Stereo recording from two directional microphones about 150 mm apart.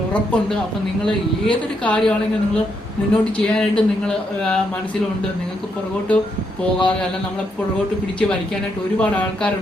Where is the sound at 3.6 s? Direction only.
5° left (ahead or behind).